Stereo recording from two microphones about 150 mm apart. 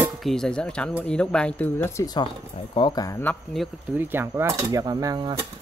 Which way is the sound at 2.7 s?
30° left (ahead or behind).